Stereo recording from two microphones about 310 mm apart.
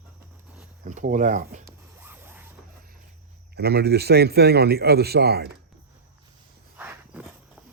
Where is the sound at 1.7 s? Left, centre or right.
Centre.